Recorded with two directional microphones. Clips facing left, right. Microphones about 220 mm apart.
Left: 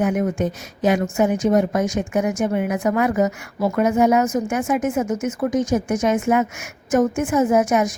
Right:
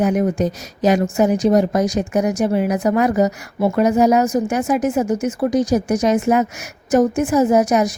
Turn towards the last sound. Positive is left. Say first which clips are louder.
# right 2 dB
turn(degrees=-35)  # may be behind; listen again after turning